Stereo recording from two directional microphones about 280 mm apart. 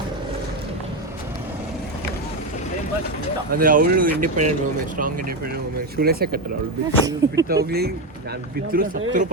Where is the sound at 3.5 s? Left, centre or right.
Right.